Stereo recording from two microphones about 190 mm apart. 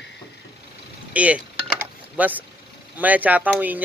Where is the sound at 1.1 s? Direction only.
5° right (ahead or behind).